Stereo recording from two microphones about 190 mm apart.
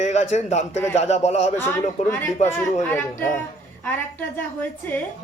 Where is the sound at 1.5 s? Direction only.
10° left (ahead or behind).